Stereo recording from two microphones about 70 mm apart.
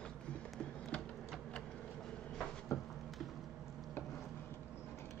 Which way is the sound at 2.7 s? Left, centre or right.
Left.